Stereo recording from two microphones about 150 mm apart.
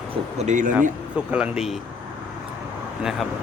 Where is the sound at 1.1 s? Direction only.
5° right (ahead or behind).